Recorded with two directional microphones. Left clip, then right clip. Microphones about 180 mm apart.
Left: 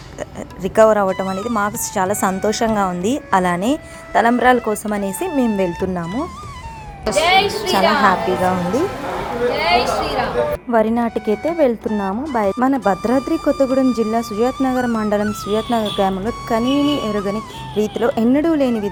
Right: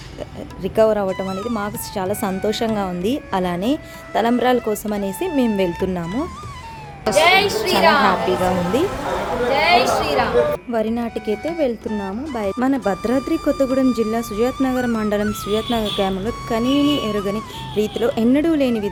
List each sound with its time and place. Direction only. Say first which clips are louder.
0.2 s speech: left 3 dB; centre (ahead or behind)
7.2 s a woman's voice: even; 20° right (ahead or behind)
8.0 s speech: left 2 dB; centre (ahead or behind)
9.5 s a woman's voice: right 2 dB; 15° right (ahead or behind)
10.7 s speech: left 5 dB; 5° left (ahead or behind)